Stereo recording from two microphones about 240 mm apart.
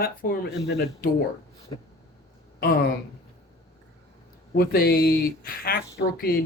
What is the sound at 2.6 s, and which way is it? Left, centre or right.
Speech, left.